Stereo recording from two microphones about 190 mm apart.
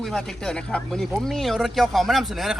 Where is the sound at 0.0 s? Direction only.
Centre (ahead or behind).